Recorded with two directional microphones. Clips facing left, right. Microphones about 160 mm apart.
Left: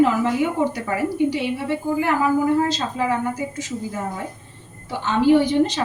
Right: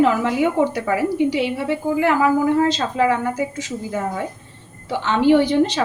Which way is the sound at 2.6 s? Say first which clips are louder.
Right 4 dB; 90° right.